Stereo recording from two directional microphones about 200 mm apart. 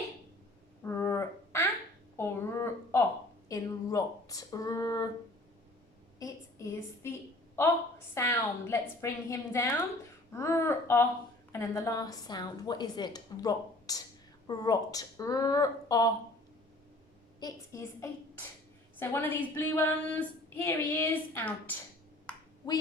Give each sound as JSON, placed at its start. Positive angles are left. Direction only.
{"t": 0.8, "sound": "a sound", "side_deg": 15}
{"t": 3.5, "sound": "speech", "side_deg": 15}
{"t": 6.1, "sound": "a woman's voice", "side_deg": 15}
{"t": 17.4, "sound": "a woman's voice", "side_deg": 15}